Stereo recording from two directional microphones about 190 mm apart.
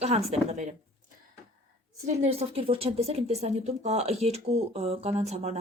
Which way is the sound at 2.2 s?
30° right (ahead or behind).